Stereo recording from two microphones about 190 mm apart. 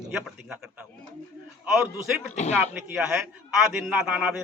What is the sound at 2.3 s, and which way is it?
Speech, 35° left (ahead or behind).